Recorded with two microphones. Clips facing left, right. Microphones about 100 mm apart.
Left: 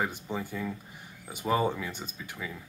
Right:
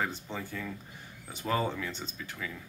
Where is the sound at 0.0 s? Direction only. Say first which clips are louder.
Left 3 dB; 15° left (ahead or behind).